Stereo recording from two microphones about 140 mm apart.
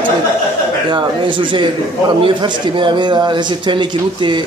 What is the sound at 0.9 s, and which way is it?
A man's voice, 35° right (ahead or behind).